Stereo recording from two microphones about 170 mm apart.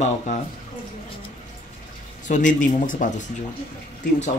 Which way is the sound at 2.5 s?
50° left (ahead or behind).